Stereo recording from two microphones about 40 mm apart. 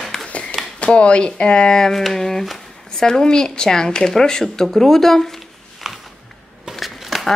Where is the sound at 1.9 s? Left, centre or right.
Centre.